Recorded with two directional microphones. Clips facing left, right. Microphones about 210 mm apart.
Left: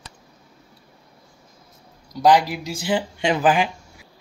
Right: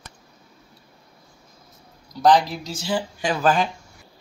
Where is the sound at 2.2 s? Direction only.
10° left (ahead or behind).